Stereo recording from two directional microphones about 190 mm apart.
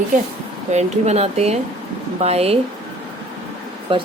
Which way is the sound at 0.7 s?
35° right (ahead or behind).